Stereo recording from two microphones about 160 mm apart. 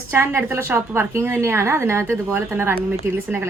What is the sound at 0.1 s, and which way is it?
A woman's voice, 15° right (ahead or behind).